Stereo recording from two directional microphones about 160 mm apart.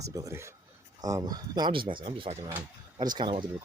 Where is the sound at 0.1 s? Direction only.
20° right (ahead or behind).